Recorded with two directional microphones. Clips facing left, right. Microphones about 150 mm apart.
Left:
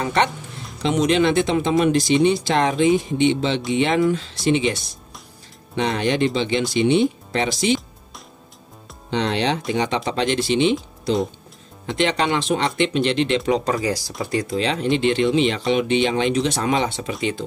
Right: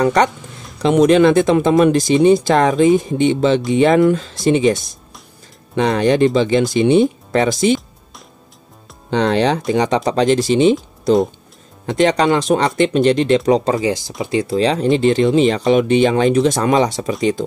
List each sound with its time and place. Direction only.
0.0 s speech: 45° right (ahead or behind)
9.1 s speech: 45° right (ahead or behind)
13.5 s speech: 25° right (ahead or behind)
14.5 s speech: 35° right (ahead or behind)